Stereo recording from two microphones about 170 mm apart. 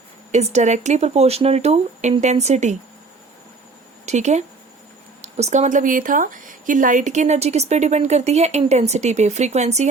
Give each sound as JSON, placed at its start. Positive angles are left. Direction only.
{"t": 0.3, "sound": "speech", "side_deg": -40}
{"t": 4.0, "sound": "speech", "side_deg": -45}